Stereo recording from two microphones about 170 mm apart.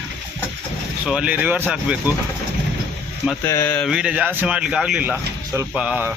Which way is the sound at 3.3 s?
15° left (ahead or behind).